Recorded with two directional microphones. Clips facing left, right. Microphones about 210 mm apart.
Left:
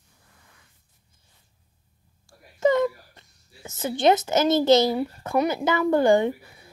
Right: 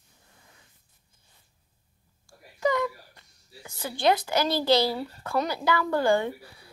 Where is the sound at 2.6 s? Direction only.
25° left (ahead or behind).